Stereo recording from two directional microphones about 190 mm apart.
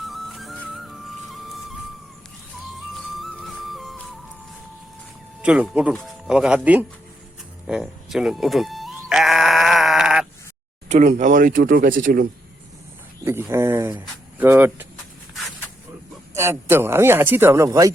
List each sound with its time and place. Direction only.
0.0 s music: centre (ahead or behind)
5.4 s speech: 5° right (ahead or behind)
7.7 s sheep: centre (ahead or behind)
10.8 s speech: 40° right (ahead or behind)
13.2 s speech: 15° right (ahead or behind)
16.3 s speech: 15° right (ahead or behind)